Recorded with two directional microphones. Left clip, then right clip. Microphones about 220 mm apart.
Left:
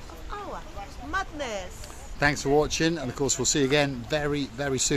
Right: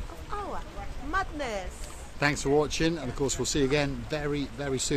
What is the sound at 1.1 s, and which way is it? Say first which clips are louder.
Speech: even; 5° right (ahead or behind).